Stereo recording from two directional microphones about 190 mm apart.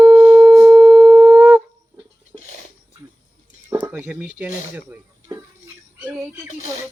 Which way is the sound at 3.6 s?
15° right (ahead or behind).